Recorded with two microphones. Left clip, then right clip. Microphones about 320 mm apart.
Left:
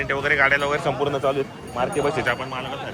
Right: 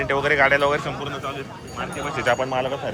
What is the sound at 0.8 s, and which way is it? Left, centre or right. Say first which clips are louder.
Speech: left 7 dB; centre.